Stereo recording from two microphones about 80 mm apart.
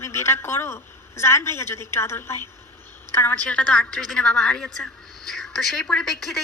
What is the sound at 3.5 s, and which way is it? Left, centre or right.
A woman's voice, centre.